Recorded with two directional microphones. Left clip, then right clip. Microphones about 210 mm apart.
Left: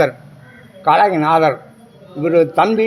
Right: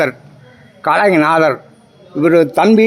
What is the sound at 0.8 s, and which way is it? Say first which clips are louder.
A man's voice: right 1 dB; 55° right (ahead or behind).